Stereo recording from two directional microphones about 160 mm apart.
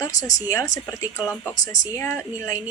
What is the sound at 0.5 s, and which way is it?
A woman's voice, 20° left (ahead or behind).